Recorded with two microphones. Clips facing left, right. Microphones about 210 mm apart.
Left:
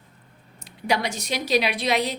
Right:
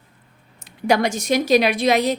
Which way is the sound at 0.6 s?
50° right (ahead or behind).